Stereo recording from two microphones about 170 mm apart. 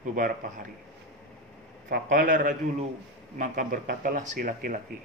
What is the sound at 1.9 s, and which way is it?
Speech, 50° right (ahead or behind).